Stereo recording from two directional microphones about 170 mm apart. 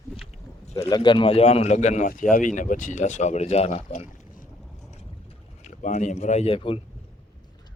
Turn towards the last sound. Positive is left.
turn(degrees=30)  # may be behind; listen again after turning